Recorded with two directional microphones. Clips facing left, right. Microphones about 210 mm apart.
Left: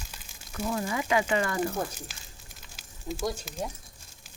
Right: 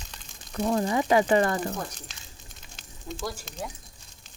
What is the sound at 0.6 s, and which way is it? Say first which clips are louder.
Speech: right 5 dB; 35° right (ahead or behind).